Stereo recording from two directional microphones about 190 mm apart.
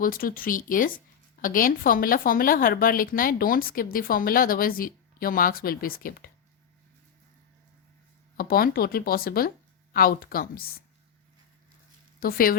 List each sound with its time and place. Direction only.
0.0 s a woman's voice: 45° left (ahead or behind)
8.4 s a woman's voice: 50° left (ahead or behind)
12.2 s a woman's voice: 50° left (ahead or behind)